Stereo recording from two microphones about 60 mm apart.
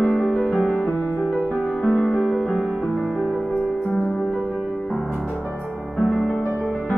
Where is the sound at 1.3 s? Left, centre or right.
Right.